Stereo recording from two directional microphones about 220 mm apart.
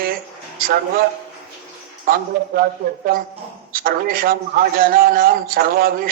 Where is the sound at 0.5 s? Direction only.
40° right (ahead or behind).